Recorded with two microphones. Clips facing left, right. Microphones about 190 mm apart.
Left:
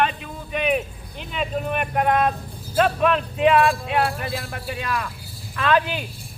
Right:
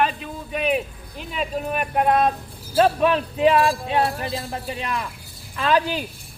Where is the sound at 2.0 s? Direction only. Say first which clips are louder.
Right 2 dB; 30° right (ahead or behind).